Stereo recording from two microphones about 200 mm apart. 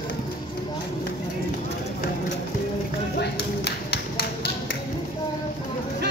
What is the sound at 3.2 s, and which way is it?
Music, 55° left (ahead or behind).